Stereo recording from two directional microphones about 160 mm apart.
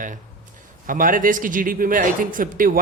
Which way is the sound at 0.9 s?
60° right (ahead or behind).